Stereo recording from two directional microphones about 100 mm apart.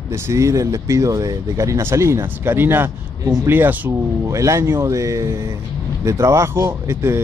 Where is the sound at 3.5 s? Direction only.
20° right (ahead or behind).